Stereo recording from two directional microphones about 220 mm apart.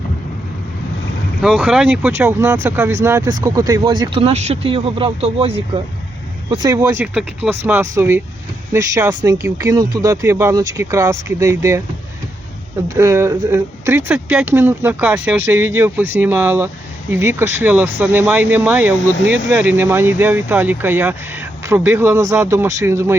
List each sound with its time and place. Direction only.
1.4 s speech: centre (ahead or behind); by 5.8 s 25° right (ahead or behind)
6.5 s speech: 15° right (ahead or behind)
12.9 s speech: 15° right (ahead or behind)